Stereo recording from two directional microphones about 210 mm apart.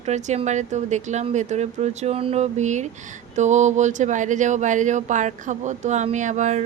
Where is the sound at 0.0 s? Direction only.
30° right (ahead or behind).